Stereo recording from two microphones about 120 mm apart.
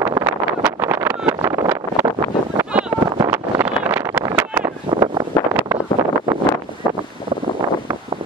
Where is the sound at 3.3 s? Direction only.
25° right (ahead or behind).